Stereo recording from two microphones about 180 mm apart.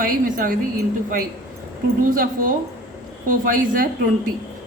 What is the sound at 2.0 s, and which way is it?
A woman's voice, 50° right (ahead or behind).